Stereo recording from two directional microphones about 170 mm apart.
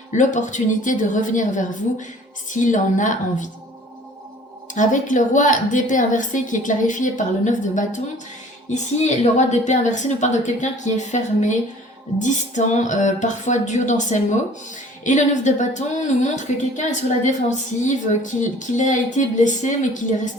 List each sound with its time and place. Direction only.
0.1 s a woman's voice: 45° left (ahead or behind)
4.7 s a woman's voice: 50° left (ahead or behind)